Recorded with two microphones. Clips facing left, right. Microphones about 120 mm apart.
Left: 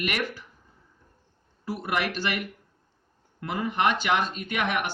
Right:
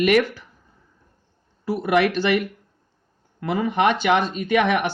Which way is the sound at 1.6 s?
90° right.